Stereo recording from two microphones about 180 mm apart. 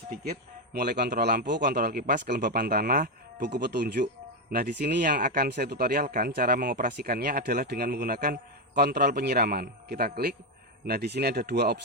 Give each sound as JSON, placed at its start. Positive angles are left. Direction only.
{"t": 0.7, "sound": "speech", "side_deg": -65}